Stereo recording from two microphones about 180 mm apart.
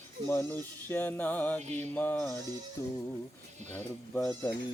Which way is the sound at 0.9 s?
10° left (ahead or behind).